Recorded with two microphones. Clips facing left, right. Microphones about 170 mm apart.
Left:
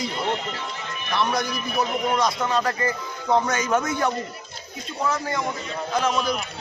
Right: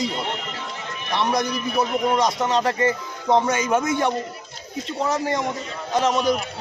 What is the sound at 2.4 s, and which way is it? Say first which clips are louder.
A man's voice: right 3 dB; 20° right (ahead or behind).